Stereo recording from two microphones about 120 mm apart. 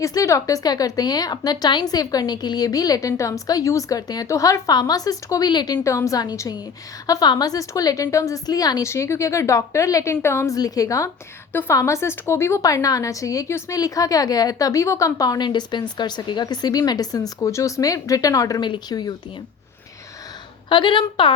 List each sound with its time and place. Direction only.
0.0 s a woman's voice: 25° left (ahead or behind)
5.8 s a woman's voice: 25° left (ahead or behind)
20.7 s a woman's voice: 40° left (ahead or behind)